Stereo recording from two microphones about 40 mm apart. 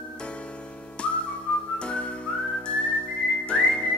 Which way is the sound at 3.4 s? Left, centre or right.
Left.